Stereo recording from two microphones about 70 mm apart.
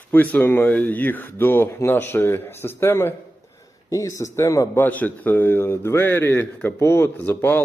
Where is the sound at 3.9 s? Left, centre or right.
Left.